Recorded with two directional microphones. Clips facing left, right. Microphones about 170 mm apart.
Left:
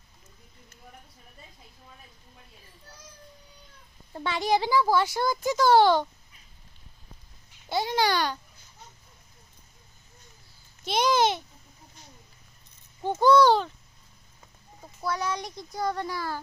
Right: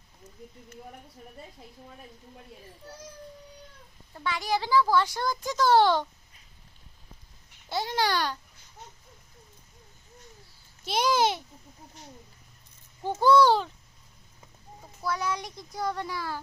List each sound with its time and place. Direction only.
4.1 s speech: 25° left (ahead or behind); by 6.1 s centre (ahead or behind)
7.7 s a child's voice: centre (ahead or behind)
10.8 s a child's voice: 5° right (ahead or behind)
13.0 s rattle: 20° left (ahead or behind)
13.2 s a child's voice: 5° right (ahead or behind)
15.0 s a child's voice: 5° right (ahead or behind)